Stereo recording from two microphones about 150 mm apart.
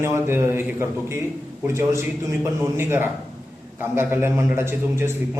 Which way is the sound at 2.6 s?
15° right (ahead or behind).